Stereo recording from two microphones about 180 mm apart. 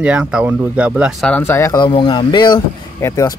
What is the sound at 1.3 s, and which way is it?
Speech, 10° left (ahead or behind).